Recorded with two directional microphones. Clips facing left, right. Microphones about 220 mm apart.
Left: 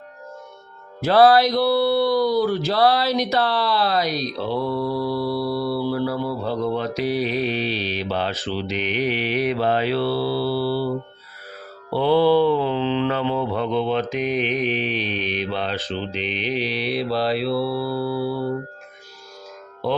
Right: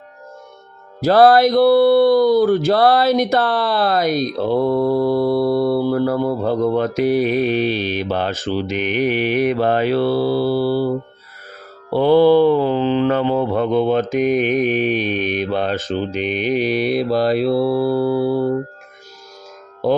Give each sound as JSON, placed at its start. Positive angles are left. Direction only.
{"t": 1.0, "sound": "speech", "side_deg": -45}